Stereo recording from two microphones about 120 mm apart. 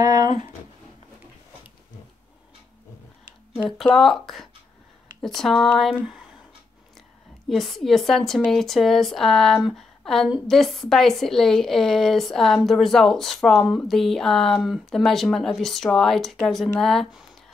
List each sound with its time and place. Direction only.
0.0 s a sound: 30° right (ahead or behind)
3.5 s speech: 5° right (ahead or behind)
7.4 s speech: centre (ahead or behind)